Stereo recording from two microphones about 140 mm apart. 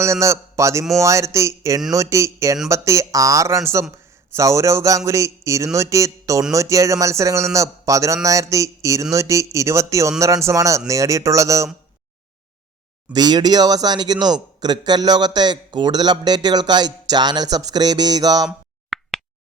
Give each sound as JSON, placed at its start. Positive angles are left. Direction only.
{"t": 0.0, "sound": "a man's voice", "side_deg": -20}
{"t": 13.1, "sound": "a man's voice", "side_deg": -30}
{"t": 18.4, "sound": "finger snapping", "side_deg": 0}